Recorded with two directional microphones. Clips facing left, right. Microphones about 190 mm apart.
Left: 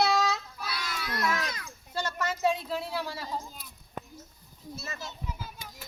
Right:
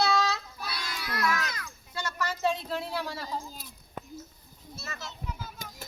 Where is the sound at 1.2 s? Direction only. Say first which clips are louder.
Right 1 dB; 25° left (ahead or behind).